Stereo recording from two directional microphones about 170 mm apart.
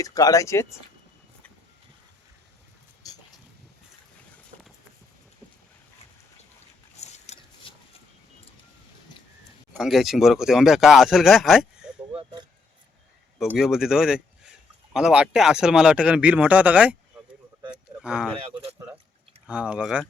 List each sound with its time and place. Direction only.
0.0 s speech: 20° left (ahead or behind)
6.9 s a sound: 40° left (ahead or behind)
9.7 s speech: centre (ahead or behind)
12.1 s speech: 25° right (ahead or behind)
13.4 s speech: 5° right (ahead or behind)
17.7 s a sound: 5° right (ahead or behind)
18.4 s speech: 35° right (ahead or behind)
19.5 s speech: 5° right (ahead or behind)